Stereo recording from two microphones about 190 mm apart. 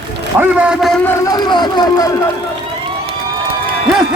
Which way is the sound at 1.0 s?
20° left (ahead or behind).